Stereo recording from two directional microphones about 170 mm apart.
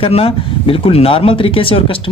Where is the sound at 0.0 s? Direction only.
35° left (ahead or behind).